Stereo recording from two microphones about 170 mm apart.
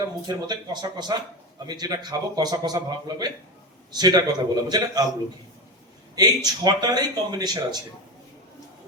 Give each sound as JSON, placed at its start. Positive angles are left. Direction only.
{"t": 0.3, "sound": "a man's voice", "side_deg": -25}
{"t": 6.1, "sound": "a man's voice", "side_deg": -25}